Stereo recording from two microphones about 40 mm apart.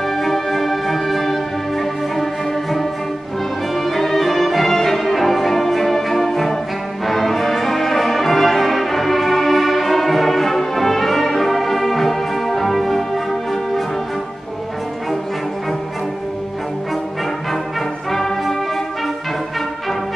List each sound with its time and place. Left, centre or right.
0.0 s music: centre
18.1 s music: centre